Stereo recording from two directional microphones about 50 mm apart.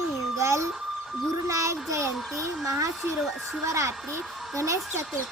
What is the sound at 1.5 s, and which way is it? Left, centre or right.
A woman's voice, right.